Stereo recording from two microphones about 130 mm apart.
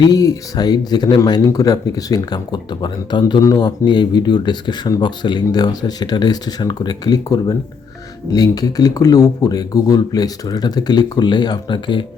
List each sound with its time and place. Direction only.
0.0 s speech: 30° left (ahead or behind)